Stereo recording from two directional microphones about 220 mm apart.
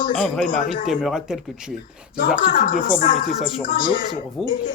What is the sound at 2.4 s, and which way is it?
Speech, 40° left (ahead or behind).